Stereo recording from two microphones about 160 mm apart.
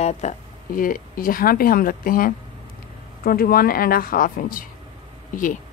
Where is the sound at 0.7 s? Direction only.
60° left (ahead or behind).